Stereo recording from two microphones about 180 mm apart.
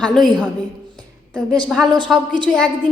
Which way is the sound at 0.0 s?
5° left (ahead or behind).